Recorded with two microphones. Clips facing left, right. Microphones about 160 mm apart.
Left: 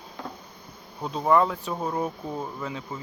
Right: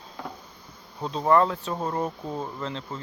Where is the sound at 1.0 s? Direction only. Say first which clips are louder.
Right 1 dB; 10° left (ahead or behind).